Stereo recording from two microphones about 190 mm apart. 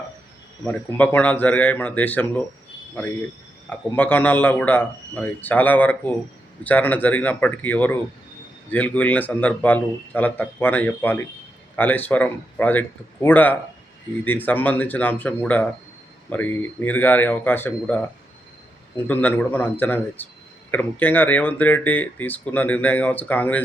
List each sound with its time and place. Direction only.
0.6 s speech: 10° left (ahead or behind)